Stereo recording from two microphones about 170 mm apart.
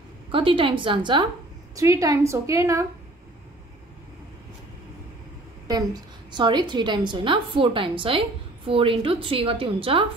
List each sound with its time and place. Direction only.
0.3 s a woman's voice: 30° right (ahead or behind)
6.3 s a woman's voice: 25° right (ahead or behind)